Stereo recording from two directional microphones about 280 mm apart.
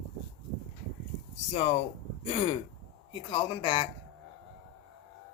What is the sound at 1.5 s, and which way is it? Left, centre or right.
Speech, left.